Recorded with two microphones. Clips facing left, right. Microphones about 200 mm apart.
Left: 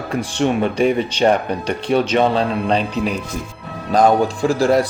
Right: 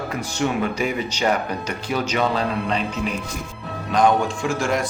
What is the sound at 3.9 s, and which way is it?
Speech, 35° left (ahead or behind).